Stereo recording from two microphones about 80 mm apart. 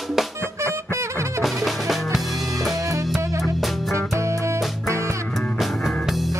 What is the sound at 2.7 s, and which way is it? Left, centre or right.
Music, right.